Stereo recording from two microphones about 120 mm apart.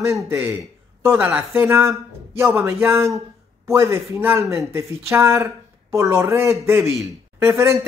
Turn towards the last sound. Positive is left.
turn(degrees=-20)  # may be behind; listen again after turning